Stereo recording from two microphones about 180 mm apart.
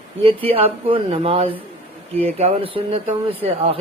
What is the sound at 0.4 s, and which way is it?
Speech, 30° right (ahead or behind).